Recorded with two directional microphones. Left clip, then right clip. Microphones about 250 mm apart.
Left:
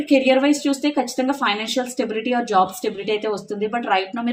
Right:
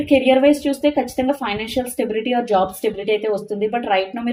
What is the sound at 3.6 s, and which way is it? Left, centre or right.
Speech, centre.